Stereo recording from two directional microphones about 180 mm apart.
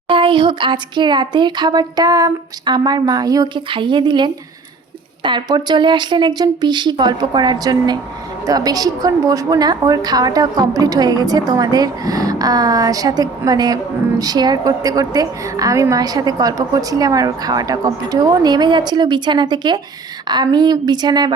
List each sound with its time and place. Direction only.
0.1 s a woman's voice: 30° right (ahead or behind)